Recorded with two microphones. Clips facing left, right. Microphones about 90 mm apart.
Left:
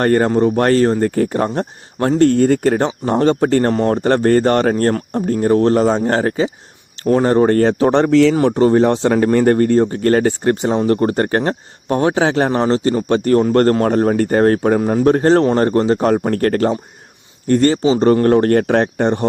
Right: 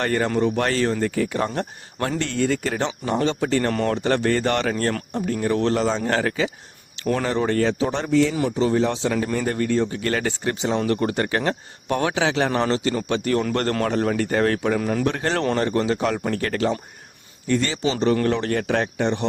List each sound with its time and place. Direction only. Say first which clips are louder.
0.0 s speech: left 8 dB; 45° left (ahead or behind)
3.7 s speech: left 7 dB; 30° left (ahead or behind)
3.9 s speech: left 8 dB; 45° left (ahead or behind)